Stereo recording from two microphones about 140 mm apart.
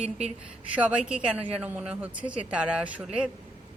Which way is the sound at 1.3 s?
10° right (ahead or behind).